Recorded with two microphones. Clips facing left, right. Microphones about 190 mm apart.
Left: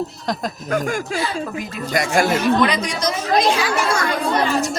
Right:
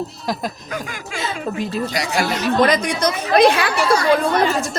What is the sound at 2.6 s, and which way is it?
A woman's voice, 45° right (ahead or behind).